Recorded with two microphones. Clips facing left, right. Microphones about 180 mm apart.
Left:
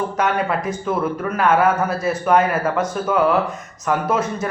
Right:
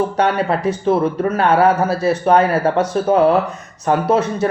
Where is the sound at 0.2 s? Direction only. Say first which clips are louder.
Right 1 dB; 30° right (ahead or behind).